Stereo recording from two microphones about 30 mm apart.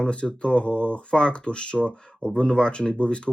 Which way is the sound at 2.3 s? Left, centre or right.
Left.